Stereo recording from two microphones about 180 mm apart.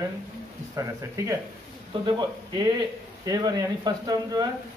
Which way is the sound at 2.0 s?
25° right (ahead or behind).